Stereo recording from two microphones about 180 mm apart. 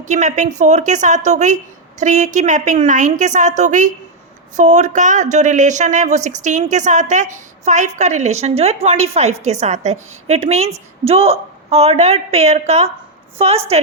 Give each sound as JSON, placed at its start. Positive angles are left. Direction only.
{"t": 0.0, "sound": "a woman's voice", "side_deg": -40}